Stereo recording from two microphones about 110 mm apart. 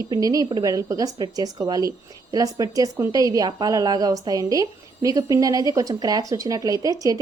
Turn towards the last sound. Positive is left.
turn(degrees=-35)  # may be behind; listen again after turning